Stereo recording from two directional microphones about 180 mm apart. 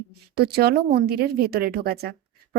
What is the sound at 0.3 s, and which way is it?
A woman's voice, 60° right (ahead or behind).